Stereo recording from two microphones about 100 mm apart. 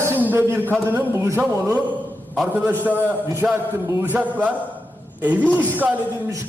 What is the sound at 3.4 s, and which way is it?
A man's voice, 10° right (ahead or behind).